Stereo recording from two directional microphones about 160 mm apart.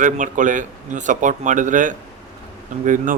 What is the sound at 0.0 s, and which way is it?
Speech, 50° right (ahead or behind).